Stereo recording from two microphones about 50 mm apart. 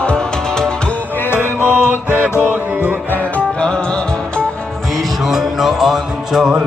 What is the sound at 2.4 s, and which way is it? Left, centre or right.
Music, right.